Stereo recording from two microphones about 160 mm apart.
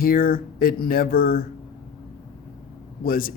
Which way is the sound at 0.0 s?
65° left (ahead or behind).